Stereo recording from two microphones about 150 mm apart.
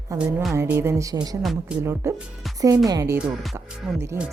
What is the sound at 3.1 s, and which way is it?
Speech, 5° right (ahead or behind).